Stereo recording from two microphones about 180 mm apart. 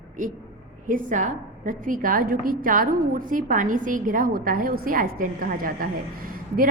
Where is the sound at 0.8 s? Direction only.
45° right (ahead or behind).